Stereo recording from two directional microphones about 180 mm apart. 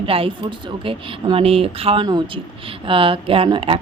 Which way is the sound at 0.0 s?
30° right (ahead or behind).